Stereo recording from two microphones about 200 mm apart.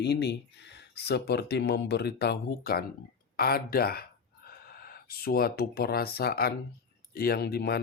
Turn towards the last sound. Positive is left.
turn(degrees=50)  # may be behind; listen again after turning